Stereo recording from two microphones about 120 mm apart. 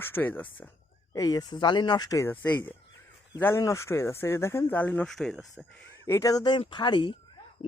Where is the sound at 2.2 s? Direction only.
15° left (ahead or behind).